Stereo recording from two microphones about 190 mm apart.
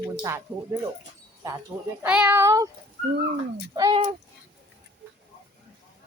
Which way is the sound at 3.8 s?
20° right (ahead or behind).